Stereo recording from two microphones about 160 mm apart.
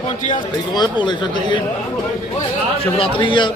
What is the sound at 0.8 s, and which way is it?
Speech, 30° left (ahead or behind).